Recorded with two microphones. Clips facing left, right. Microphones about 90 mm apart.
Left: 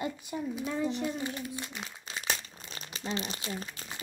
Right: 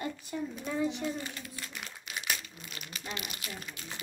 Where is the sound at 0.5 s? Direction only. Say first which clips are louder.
Left 1 dB; centre (ahead or behind).